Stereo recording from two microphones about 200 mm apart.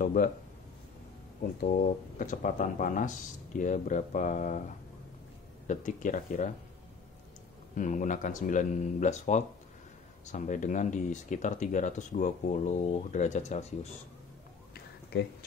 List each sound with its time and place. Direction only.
0.0 s speech: 40° left (ahead or behind)
2.1 s speech: 40° left (ahead or behind)
7.7 s speech: 40° left (ahead or behind)
14.7 s a sound: 55° left (ahead or behind)